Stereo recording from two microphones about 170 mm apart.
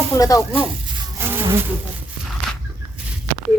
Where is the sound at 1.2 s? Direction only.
15° right (ahead or behind).